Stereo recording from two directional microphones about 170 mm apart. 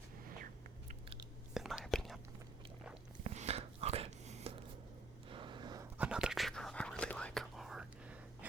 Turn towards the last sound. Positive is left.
turn(degrees=0)  # may be behind; listen again after turning